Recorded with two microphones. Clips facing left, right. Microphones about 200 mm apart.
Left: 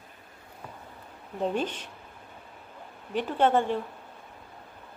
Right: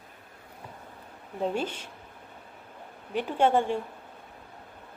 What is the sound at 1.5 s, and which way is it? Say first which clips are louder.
Speech: left 1 dB; 10° right (ahead or behind).